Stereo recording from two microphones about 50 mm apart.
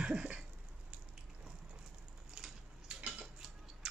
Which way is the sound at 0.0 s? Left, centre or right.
Centre.